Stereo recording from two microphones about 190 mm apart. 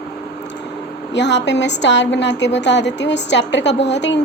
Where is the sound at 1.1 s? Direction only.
65° left (ahead or behind).